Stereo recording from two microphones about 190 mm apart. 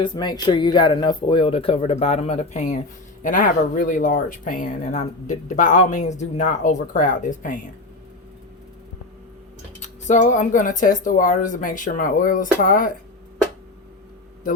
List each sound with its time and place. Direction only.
0.0 s speech: 20° left (ahead or behind); by 7.6 s 45° left (ahead or behind)
9.8 s speech: 40° left (ahead or behind)